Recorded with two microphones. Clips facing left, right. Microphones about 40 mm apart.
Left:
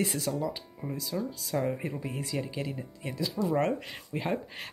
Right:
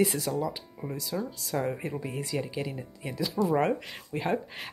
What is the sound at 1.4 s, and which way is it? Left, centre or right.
A woman's voice, centre.